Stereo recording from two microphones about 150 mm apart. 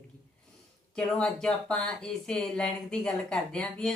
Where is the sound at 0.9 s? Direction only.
5° left (ahead or behind).